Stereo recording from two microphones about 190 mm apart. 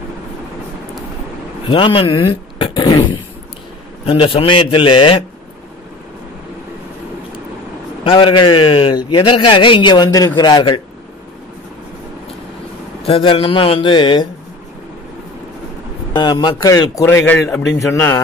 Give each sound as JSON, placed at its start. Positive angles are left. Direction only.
{"t": 1.7, "sound": "a man's voice", "side_deg": 30}
{"t": 8.0, "sound": "a man's voice", "side_deg": 25}
{"t": 13.0, "sound": "a man's voice", "side_deg": 25}
{"t": 16.2, "sound": "a man's voice", "side_deg": 20}